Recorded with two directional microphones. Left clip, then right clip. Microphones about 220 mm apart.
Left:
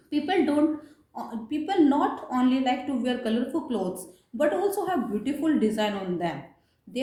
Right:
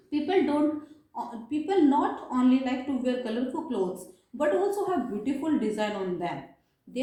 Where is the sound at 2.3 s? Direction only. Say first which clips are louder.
Left 1 dB; 55° left (ahead or behind).